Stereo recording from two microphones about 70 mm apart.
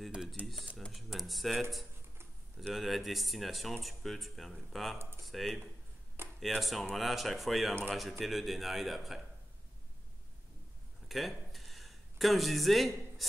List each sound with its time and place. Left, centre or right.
0.4 s speech: right
0.9 s speech: centre
11.1 s a sound: centre